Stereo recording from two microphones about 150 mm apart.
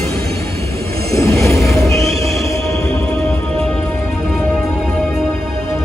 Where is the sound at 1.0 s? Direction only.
20° left (ahead or behind).